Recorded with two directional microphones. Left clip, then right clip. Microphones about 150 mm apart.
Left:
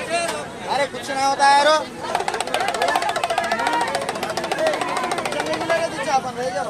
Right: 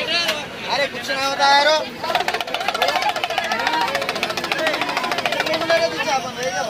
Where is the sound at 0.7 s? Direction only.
70° left (ahead or behind).